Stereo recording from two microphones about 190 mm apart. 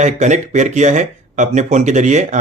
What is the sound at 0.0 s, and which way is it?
A man's voice, 40° right (ahead or behind).